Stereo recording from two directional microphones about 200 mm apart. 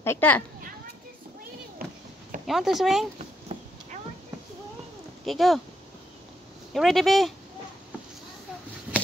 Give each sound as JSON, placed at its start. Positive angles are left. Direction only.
{"t": 0.0, "sound": "a child's voice", "side_deg": 10}
{"t": 1.8, "sound": "a sound", "side_deg": -45}
{"t": 2.4, "sound": "speech", "side_deg": 0}
{"t": 3.5, "sound": "a sound", "side_deg": -30}
{"t": 5.2, "sound": "speech", "side_deg": 0}
{"t": 6.7, "sound": "speech", "side_deg": 0}